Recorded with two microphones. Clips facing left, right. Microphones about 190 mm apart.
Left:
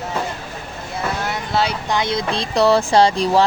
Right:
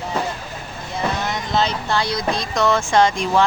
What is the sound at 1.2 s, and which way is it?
Speech, 10° left (ahead or behind).